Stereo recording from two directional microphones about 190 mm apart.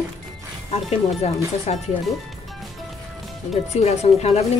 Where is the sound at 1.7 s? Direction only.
35° left (ahead or behind).